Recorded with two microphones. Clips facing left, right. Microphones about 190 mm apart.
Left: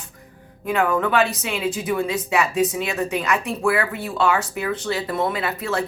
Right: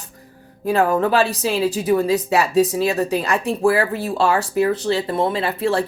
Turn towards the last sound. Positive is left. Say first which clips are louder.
# right 5 dB
turn(degrees=-30)  # may be behind; listen again after turning